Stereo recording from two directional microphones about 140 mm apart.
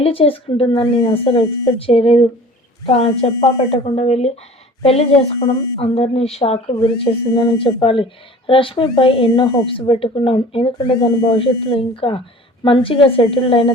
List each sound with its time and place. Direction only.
0.0 s a woman's voice: 40° left (ahead or behind)
5.4 s speech: 30° left (ahead or behind)
5.8 s a woman's voice: 45° left (ahead or behind)
6.7 s speech: 35° left (ahead or behind)
11.0 s speech: 30° left (ahead or behind)
11.3 s speech: 40° left (ahead or behind)